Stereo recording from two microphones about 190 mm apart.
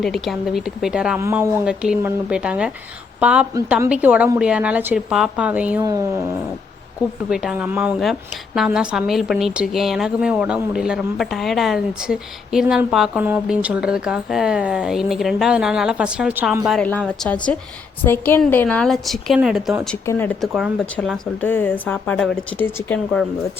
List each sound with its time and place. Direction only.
0.0 s a woman's voice: centre (ahead or behind)
5.8 s speech: 20° right (ahead or behind)
7.3 s a woman's voice: 5° right (ahead or behind)
16.6 s a woman's voice: 5° left (ahead or behind)
20.1 s a woman's voice: 10° left (ahead or behind)